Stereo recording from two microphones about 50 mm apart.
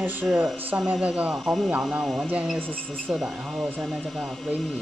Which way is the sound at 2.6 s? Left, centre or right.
Left.